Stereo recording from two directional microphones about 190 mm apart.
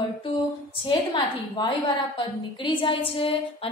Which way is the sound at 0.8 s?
25° left (ahead or behind).